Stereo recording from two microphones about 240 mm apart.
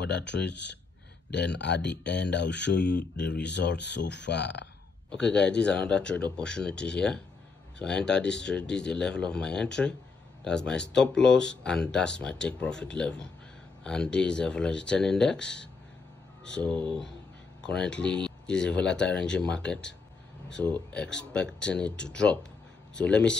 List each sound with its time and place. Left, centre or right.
0.0 s speech: left
5.1 s speech: centre